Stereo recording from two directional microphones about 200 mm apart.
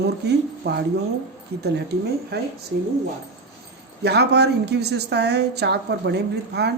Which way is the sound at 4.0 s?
55° right (ahead or behind).